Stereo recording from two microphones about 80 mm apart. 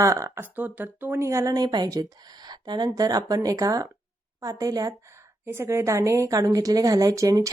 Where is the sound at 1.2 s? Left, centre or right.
Right.